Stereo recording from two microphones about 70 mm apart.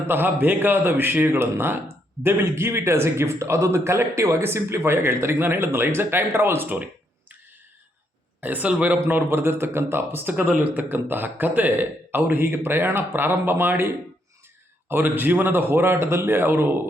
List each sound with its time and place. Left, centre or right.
0.1 s a man's voice: right
8.4 s a man's voice: right
9.0 s a man's voice: right
10.3 s a man's voice: right